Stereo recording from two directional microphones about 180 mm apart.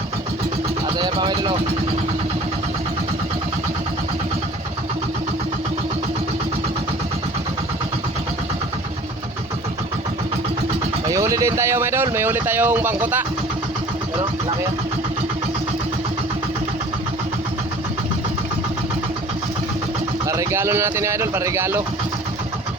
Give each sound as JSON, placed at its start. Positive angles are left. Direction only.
{"t": 0.9, "sound": "speech", "side_deg": -25}
{"t": 11.1, "sound": "speech", "side_deg": -15}
{"t": 20.2, "sound": "speech", "side_deg": -15}